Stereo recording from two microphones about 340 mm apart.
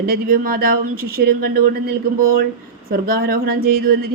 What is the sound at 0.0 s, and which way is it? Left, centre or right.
Speech, right.